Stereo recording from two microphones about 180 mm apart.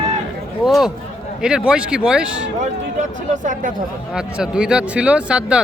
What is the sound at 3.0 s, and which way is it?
Speech, 45° right (ahead or behind).